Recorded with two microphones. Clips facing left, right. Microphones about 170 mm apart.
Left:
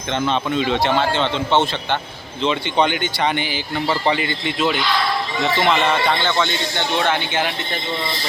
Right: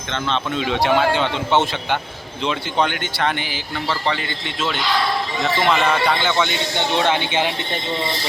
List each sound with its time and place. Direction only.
0.5 s speech: centre (ahead or behind)
3.8 s speech: 10° left (ahead or behind)
6.2 s a man's voice: 10° right (ahead or behind)